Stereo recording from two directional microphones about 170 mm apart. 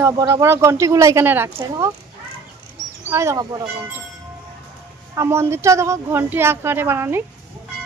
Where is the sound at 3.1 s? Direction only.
15° right (ahead or behind).